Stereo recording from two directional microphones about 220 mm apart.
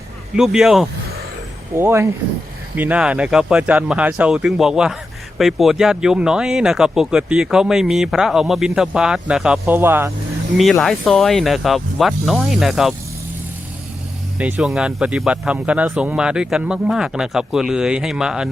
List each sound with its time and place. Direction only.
0.3 s speech: centre (ahead or behind)
10.6 s speech: centre (ahead or behind)
14.3 s speech: 5° right (ahead or behind)